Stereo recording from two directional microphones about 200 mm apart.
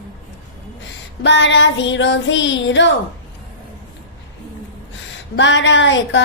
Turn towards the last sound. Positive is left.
turn(degrees=65)  # may be behind; listen again after turning